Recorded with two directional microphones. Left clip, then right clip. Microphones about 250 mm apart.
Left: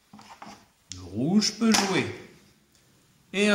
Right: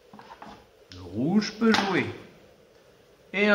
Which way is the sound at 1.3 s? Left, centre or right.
Left.